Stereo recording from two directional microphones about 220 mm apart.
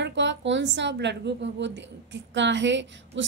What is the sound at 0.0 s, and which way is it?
A woman's voice, 55° right (ahead or behind).